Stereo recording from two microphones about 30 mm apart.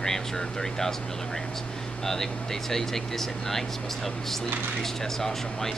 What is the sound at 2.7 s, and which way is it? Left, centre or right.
Speech, centre.